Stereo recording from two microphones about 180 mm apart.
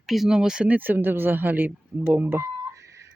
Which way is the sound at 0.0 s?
Centre (ahead or behind).